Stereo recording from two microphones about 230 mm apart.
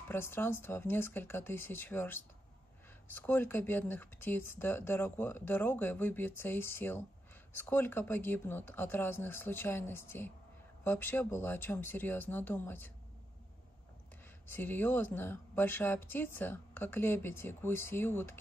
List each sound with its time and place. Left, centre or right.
0.1 s a woman's voice: centre
14.5 s a woman's voice: centre